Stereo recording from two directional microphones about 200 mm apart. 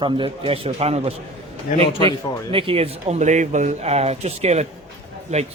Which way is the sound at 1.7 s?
40° left (ahead or behind).